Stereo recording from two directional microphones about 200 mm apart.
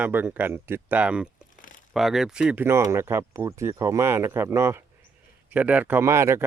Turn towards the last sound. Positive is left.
turn(degrees=-15)  # may be behind; listen again after turning